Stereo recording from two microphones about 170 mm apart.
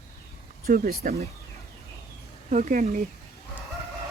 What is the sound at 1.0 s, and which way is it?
Speech, 55° right (ahead or behind).